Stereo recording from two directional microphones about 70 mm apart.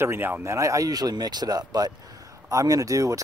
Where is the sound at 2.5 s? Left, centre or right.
Right.